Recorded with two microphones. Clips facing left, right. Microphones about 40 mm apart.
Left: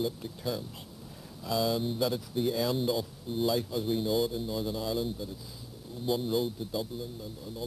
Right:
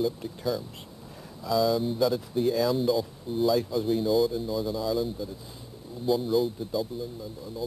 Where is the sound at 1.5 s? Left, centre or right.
Centre.